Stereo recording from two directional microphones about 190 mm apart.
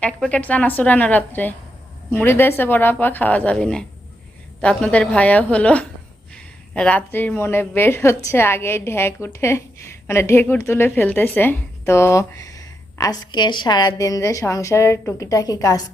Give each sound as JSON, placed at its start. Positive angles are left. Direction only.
{"t": 0.0, "sound": "a woman's voice", "side_deg": 5}